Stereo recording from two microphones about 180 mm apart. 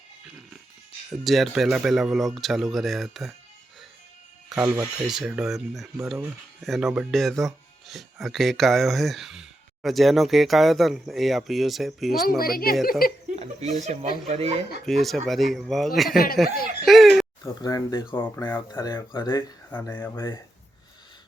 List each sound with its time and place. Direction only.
1.2 s speech: centre (ahead or behind)
4.4 s speech: 5° right (ahead or behind)
12.4 s speech: 55° left (ahead or behind)
13.3 s speech: 35° right (ahead or behind)
14.8 s speech: centre (ahead or behind)
16.8 s a sound: centre (ahead or behind)
17.4 s speech: 20° left (ahead or behind)